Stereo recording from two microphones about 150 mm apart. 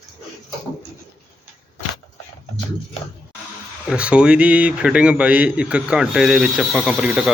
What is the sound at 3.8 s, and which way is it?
A man's voice, 5° right (ahead or behind).